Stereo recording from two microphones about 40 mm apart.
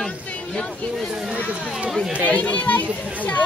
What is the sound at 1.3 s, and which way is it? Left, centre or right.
Speech, right.